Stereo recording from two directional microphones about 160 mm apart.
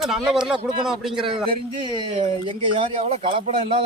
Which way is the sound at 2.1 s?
40° right (ahead or behind).